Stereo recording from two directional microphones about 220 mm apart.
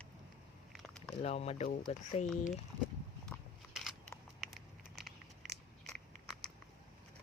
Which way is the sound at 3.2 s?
Centre (ahead or behind).